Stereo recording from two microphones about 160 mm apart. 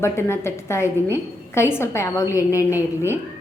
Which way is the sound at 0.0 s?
15° left (ahead or behind).